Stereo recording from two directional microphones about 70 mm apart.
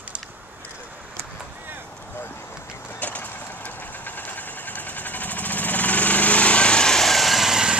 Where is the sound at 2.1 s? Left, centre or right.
Left.